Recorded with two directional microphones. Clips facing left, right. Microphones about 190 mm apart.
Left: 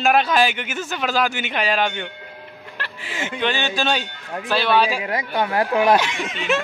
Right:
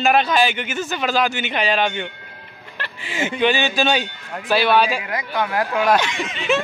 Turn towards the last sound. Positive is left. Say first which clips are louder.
# right 2 dB
turn(degrees=5)  # may be behind; listen again after turning